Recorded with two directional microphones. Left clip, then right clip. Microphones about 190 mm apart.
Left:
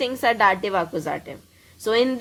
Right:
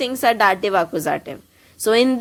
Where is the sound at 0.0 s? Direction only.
25° right (ahead or behind).